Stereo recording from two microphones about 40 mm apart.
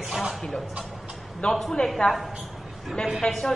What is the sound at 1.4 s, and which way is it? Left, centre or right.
Speech, left.